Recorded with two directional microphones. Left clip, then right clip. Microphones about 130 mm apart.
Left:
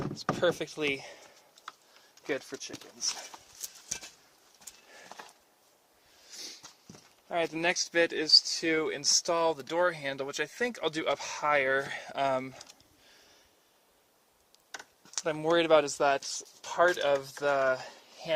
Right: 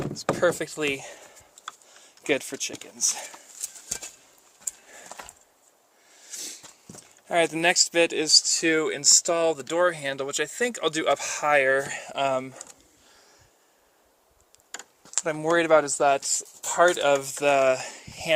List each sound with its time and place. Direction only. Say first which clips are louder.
0.1 s speech: right 5 dB; 5° right (ahead or behind)
2.2 s speech: right 9 dB; 55° right (ahead or behind)
4.9 s horse: right 5 dB; 20° right (ahead or behind)
6.3 s a sound: right 6 dB; 15° right (ahead or behind)
7.3 s speech: right 8 dB; 45° right (ahead or behind)
7.5 s speech: right 7 dB; 25° right (ahead or behind)
8.2 s speech: right 4 dB; 35° right (ahead or behind)
8.8 s speech: right 7 dB; 15° right (ahead or behind); by 12.5 s 5° left (ahead or behind)
15.2 s speech: right 4 dB; centre (ahead or behind)
16.2 s speech: right 9 dB; 25° right (ahead or behind); by 18.3 s 45° right (ahead or behind)